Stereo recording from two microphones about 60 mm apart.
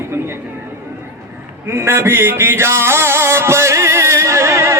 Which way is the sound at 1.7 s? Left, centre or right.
Right.